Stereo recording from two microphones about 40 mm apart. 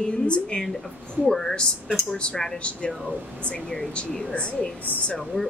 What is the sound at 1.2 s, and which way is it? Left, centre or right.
Speech, centre.